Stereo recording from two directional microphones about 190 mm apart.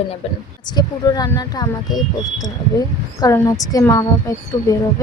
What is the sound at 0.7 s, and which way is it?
A woman's voice, 20° left (ahead or behind).